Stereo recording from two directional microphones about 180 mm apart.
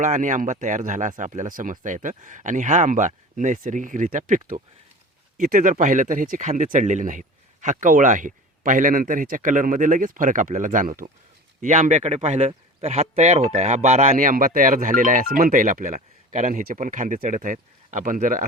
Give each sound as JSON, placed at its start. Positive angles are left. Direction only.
{"t": 0.0, "sound": "speech", "side_deg": -45}